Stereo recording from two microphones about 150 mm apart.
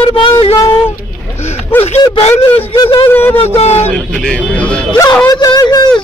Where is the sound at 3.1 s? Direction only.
15° left (ahead or behind).